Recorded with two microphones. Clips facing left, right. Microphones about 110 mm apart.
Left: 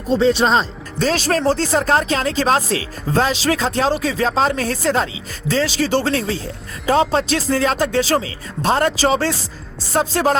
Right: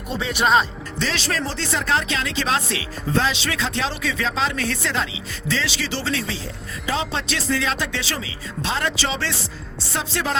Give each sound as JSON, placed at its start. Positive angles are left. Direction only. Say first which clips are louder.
{"t": 0.1, "sound": "speech", "louder": "left 5 dB", "side_deg": 30}